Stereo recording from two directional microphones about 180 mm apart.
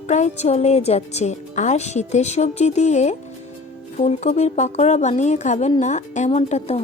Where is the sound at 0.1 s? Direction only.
40° left (ahead or behind).